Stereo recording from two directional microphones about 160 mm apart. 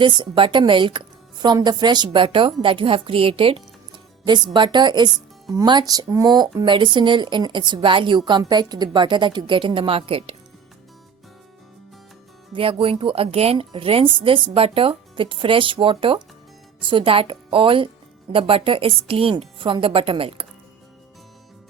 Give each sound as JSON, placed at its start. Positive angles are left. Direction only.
{"t": 0.0, "sound": "speech", "side_deg": -30}
{"t": 12.5, "sound": "speech", "side_deg": -35}